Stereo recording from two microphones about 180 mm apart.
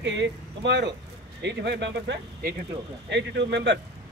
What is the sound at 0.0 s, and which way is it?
Speech, 85° right.